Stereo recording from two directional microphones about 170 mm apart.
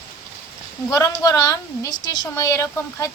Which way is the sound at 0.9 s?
20° left (ahead or behind).